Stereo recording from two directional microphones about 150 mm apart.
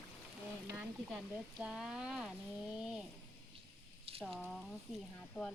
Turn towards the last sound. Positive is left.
turn(degrees=5)  # may be behind; listen again after turning